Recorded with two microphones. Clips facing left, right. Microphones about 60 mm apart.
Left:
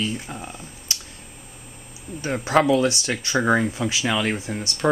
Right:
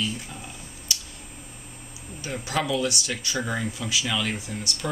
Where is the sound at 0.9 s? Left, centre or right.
Left.